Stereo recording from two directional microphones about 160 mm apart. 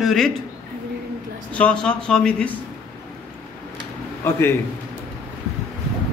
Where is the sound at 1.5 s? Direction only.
5° left (ahead or behind).